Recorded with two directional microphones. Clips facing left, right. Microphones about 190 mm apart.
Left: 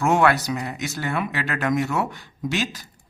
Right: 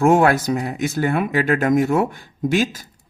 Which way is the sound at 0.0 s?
50° right (ahead or behind).